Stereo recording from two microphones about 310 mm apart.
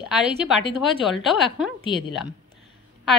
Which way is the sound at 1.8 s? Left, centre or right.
Centre.